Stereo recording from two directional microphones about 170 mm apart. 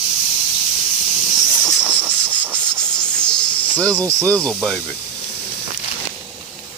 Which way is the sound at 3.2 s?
5° left (ahead or behind).